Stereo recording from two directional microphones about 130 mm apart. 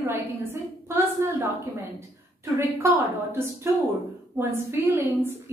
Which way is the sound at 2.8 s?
20° right (ahead or behind).